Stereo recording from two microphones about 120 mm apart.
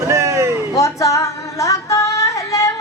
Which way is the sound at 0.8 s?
25° left (ahead or behind).